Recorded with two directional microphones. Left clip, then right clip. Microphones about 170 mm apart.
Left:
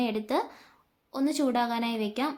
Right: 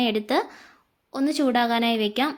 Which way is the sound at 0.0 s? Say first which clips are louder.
Right 6 dB; 25° right (ahead or behind).